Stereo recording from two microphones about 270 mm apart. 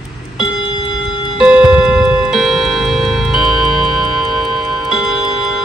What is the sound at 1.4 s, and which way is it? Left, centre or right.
Music, centre.